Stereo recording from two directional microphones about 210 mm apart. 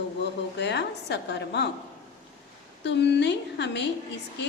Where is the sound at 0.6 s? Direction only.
55° left (ahead or behind).